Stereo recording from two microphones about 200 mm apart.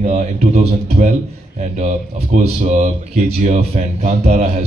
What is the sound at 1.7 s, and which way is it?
Speech, 35° right (ahead or behind).